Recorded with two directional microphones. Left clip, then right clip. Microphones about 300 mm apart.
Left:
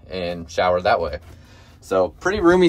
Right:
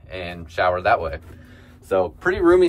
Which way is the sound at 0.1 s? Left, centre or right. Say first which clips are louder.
Left 5 dB; centre.